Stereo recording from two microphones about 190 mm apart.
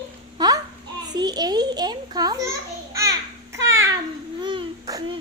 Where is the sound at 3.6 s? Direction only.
15° right (ahead or behind).